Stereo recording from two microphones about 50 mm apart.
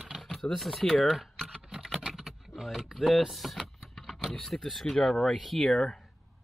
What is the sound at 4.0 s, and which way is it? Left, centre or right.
Speech, centre.